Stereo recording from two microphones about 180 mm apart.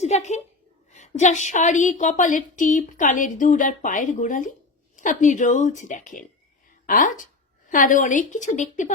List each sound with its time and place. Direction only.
0.0 s a woman's voice: 40° left (ahead or behind)